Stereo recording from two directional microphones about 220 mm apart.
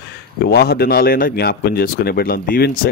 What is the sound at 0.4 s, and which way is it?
Speech, 45° left (ahead or behind).